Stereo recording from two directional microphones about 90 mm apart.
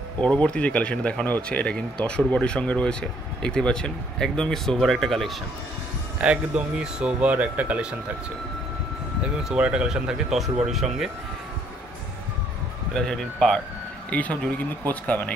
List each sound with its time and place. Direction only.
0.2 s speech: 10° left (ahead or behind)
6.1 s speech: 15° right (ahead or behind)
9.2 s speech: 10° right (ahead or behind)
12.9 s speech: 5° left (ahead or behind)